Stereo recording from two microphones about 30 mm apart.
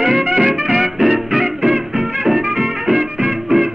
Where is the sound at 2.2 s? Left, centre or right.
Centre.